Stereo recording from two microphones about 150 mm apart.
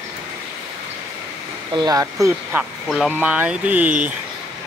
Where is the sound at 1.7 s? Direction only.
25° right (ahead or behind); by 4.1 s 10° right (ahead or behind).